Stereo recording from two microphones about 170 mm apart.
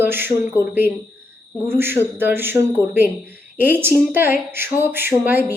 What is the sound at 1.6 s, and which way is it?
Speech, 15° right (ahead or behind).